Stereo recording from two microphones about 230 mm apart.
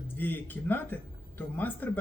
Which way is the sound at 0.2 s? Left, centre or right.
Centre.